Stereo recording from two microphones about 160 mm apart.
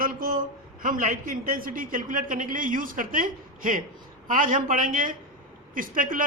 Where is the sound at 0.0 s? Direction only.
60° right (ahead or behind).